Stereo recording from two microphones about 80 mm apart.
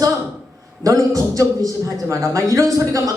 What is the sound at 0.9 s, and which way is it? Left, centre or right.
A man's voice, right.